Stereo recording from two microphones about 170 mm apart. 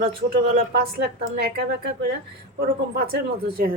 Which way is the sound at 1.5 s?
75° right (ahead or behind).